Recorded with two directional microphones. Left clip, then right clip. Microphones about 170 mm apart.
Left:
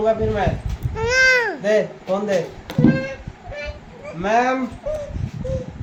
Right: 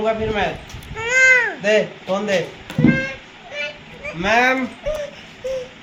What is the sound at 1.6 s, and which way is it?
Speech, 15° left (ahead or behind).